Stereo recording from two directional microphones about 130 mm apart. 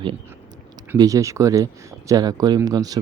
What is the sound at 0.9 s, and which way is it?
Speech, 25° right (ahead or behind).